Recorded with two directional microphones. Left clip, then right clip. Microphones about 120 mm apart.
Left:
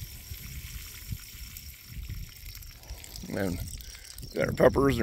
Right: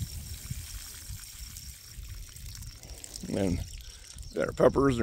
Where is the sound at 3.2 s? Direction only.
55° right (ahead or behind).